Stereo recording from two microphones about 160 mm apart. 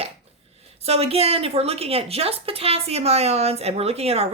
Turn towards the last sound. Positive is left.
turn(degrees=-40)  # may be behind; listen again after turning